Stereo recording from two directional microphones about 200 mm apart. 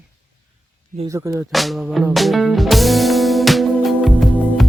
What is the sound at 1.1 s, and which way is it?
Speech, 15° right (ahead or behind).